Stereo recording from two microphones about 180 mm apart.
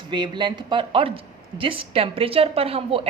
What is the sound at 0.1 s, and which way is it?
Speech, 25° right (ahead or behind).